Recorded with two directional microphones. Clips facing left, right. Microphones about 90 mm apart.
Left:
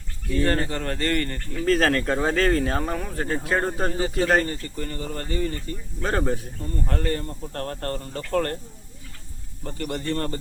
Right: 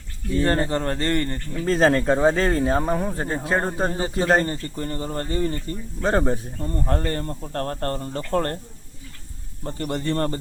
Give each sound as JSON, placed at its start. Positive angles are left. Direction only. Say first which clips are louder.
{"t": 0.3, "sound": "speech", "louder": "right 2 dB", "side_deg": -25}
{"t": 9.6, "sound": "speech", "louder": "right 2 dB", "side_deg": -35}